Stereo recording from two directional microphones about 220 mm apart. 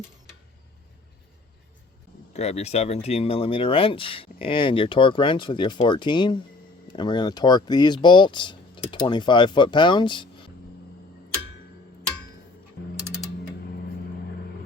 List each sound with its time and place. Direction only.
2.3 s speech: 30° left (ahead or behind)